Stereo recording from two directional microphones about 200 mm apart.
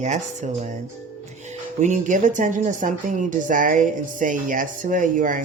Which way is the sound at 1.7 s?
35° right (ahead or behind).